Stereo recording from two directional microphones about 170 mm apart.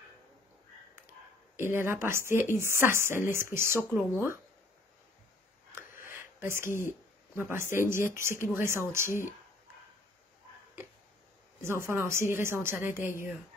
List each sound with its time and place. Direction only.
1.6 s a woman's voice: 15° right (ahead or behind)
5.7 s a sound: 15° right (ahead or behind)
7.3 s a woman's voice: 15° right (ahead or behind)
11.6 s a woman's voice: 15° right (ahead or behind)